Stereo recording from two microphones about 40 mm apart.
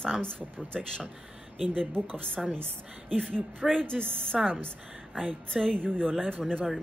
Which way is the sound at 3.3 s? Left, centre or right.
Right.